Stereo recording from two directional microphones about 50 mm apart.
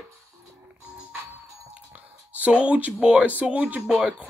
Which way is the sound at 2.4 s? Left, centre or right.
Right.